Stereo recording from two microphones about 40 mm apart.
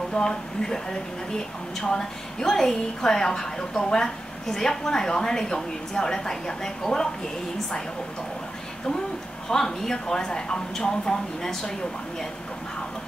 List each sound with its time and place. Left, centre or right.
0.1 s speech: left
1.8 s a woman's voice: centre
9.5 s a woman's voice: centre